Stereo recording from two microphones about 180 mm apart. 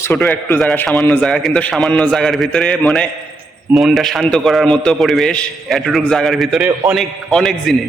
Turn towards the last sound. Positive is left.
turn(degrees=0)  # may be behind; listen again after turning